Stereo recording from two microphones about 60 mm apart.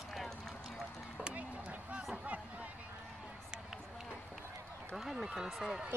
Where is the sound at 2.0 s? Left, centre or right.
Centre.